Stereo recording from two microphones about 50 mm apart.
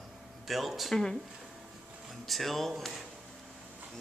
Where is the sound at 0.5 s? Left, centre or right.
Centre.